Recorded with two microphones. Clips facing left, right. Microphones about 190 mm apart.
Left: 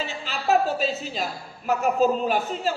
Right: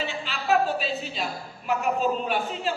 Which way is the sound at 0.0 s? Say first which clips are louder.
Left 2 dB; 40° left (ahead or behind).